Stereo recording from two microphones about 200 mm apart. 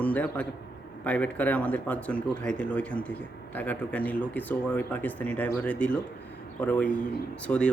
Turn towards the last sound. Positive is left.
turn(degrees=5)  # may be behind; listen again after turning